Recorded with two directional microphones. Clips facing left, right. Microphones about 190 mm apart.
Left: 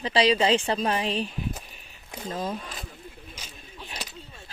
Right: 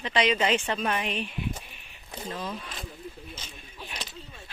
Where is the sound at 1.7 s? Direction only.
40° left (ahead or behind).